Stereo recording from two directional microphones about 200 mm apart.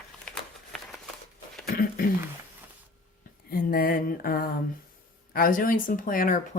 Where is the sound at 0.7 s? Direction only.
5° left (ahead or behind).